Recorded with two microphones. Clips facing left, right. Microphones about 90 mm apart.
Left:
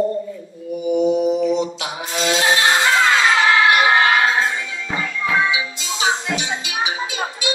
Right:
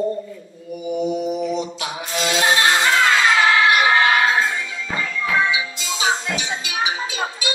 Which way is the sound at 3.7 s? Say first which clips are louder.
Left 1 dB; 20° left (ahead or behind).